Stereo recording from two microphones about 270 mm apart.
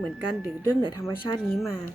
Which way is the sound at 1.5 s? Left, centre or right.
Centre.